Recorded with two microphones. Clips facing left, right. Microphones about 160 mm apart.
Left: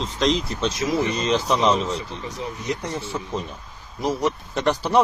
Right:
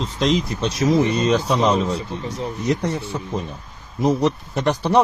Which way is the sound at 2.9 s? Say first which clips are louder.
Right 2 dB; 15° right (ahead or behind).